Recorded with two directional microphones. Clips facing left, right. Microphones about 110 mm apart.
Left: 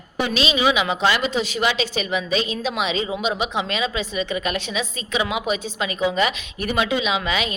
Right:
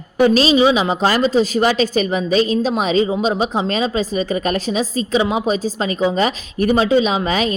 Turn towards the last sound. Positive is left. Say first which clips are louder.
# right 5 dB
turn(degrees=-40)  # may be behind; listen again after turning